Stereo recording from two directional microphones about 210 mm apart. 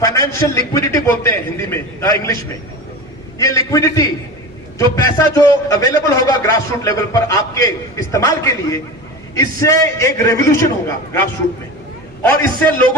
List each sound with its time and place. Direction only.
0.0 s a man's voice: 15° left (ahead or behind)
3.3 s a man's voice: 15° left (ahead or behind)
12.2 s a man's voice: 5° left (ahead or behind)